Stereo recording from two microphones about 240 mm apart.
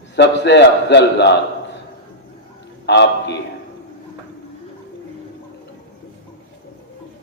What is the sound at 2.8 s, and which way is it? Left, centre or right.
Speech, left.